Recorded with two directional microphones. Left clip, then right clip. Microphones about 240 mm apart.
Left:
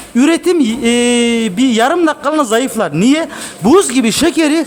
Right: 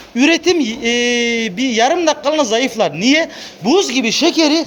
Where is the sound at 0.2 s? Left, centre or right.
Centre.